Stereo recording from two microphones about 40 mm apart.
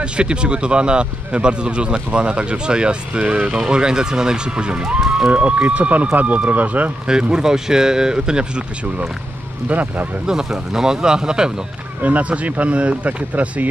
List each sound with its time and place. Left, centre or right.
0.0 s speech: right
7.1 s speech: right
9.7 s speech: right
10.2 s speech: centre
12.0 s speech: right